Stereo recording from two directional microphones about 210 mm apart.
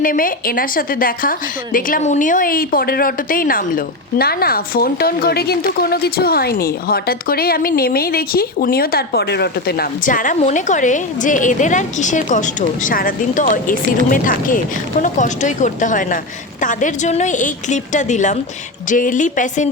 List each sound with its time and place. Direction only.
0.0 s a woman's voice: 40° left (ahead or behind)